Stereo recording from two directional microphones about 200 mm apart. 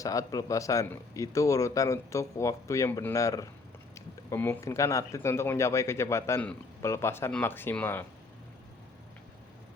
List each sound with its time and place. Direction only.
0.0 s speech: 15° left (ahead or behind)